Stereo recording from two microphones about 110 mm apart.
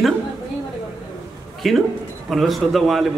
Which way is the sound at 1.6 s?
Centre (ahead or behind).